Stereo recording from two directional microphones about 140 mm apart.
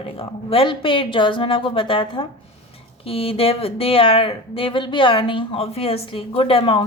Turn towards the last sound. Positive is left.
turn(degrees=40)  # may be behind; listen again after turning